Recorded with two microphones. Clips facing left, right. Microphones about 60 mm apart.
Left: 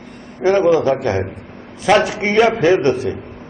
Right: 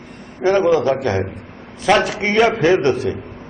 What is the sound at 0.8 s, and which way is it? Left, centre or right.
A man's voice, left.